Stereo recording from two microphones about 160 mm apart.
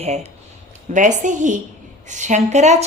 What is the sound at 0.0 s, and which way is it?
A woman's voice, 40° right (ahead or behind).